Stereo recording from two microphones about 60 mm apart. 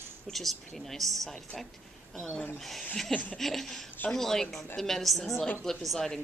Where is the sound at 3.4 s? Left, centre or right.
Centre.